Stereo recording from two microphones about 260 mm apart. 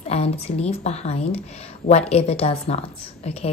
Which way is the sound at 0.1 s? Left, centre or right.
Left.